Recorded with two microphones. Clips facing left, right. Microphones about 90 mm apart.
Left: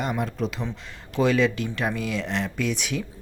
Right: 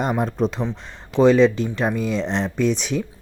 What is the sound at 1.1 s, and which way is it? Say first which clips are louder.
Speech: right 7 dB; 25° right (ahead or behind).